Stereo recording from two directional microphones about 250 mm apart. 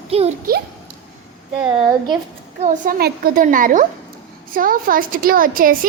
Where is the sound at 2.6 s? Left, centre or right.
Right.